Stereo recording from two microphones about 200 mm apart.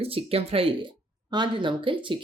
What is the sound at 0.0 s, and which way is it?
Speech, 30° right (ahead or behind).